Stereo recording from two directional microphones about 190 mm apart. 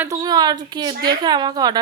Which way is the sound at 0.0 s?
20° right (ahead or behind).